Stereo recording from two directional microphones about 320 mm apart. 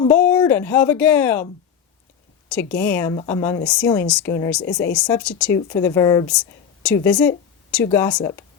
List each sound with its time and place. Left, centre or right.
0.0 s speech: centre
2.5 s a woman's voice: centre